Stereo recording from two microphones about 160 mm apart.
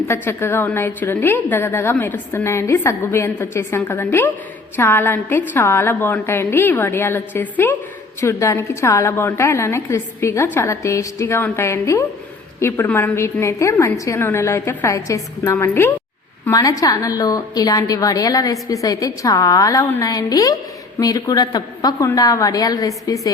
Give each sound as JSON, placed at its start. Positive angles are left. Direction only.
{"t": 0.1, "sound": "a woman's voice", "side_deg": 15}